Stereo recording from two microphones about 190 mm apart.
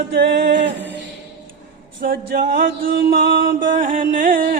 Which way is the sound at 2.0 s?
55° right (ahead or behind).